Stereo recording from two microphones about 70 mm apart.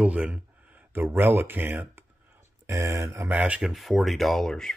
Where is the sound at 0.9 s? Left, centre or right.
Right.